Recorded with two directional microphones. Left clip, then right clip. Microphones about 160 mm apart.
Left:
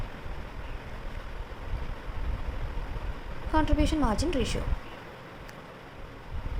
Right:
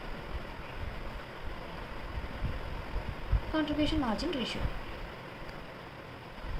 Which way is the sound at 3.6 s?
90° left.